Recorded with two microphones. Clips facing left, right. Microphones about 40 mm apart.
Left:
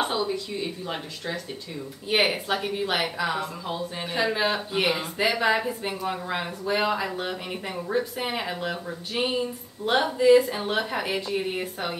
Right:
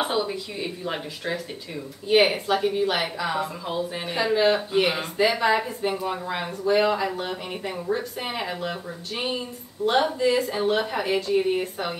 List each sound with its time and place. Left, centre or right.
0.0 s speech: centre
2.0 s speech: centre